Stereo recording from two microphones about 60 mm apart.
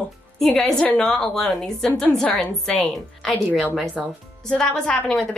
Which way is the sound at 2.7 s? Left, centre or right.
Left.